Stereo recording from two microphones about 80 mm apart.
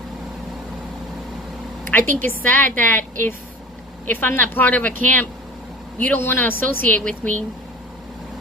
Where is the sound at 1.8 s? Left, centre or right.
Left.